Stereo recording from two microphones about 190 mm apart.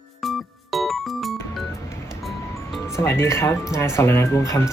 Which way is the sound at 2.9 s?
15° left (ahead or behind).